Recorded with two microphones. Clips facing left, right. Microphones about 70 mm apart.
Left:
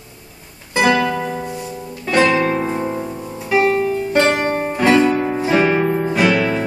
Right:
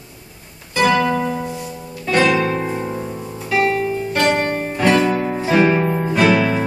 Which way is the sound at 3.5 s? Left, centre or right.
Left.